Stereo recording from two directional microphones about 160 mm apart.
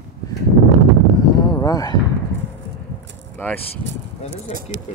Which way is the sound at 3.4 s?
10° left (ahead or behind).